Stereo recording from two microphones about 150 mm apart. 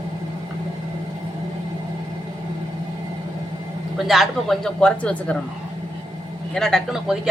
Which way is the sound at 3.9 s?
Centre (ahead or behind).